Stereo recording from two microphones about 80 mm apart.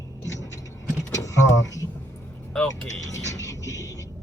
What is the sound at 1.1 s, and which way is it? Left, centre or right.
Power windows, left.